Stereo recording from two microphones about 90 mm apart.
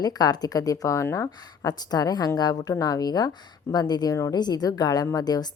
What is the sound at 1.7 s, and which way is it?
A woman's voice, 50° left (ahead or behind).